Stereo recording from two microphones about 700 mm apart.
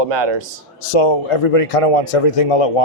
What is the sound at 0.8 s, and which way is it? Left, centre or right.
A man's voice, left.